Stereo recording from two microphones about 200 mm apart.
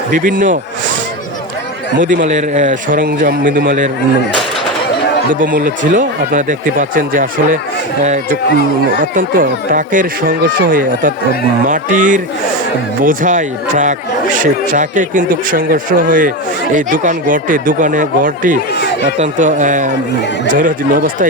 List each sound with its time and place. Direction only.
0.1 s speech: 40° right (ahead or behind)
2.0 s speech: 35° right (ahead or behind)
5.3 s speech: 45° right (ahead or behind)